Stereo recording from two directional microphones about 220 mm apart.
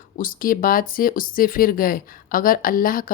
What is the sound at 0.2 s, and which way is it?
Speech, 40° left (ahead or behind).